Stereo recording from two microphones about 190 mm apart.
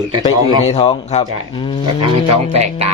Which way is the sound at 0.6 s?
30° left (ahead or behind).